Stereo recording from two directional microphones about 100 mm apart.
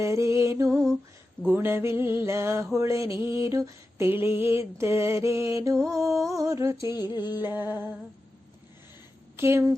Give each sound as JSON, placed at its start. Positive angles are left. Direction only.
{"t": 0.0, "sound": "lullaby", "side_deg": -30}
{"t": 1.5, "sound": "mantra", "side_deg": -20}
{"t": 6.0, "sound": "music", "side_deg": 0}
{"t": 6.2, "sound": "music", "side_deg": -35}
{"t": 6.8, "sound": "a sound", "side_deg": 45}
{"t": 7.4, "sound": "mantra", "side_deg": -20}
{"t": 9.3, "sound": "speech", "side_deg": -25}